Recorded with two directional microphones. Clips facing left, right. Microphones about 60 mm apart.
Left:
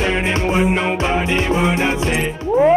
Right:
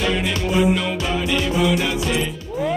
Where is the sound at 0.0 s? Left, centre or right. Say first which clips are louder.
Left 3 dB; left.